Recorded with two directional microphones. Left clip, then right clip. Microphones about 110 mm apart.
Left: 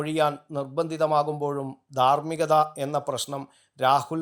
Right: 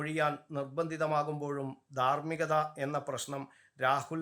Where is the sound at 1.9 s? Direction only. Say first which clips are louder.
Left 9 dB; 35° left (ahead or behind).